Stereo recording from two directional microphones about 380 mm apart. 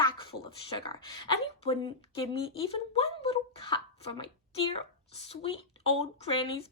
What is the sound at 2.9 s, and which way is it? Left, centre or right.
A woman's voice, centre.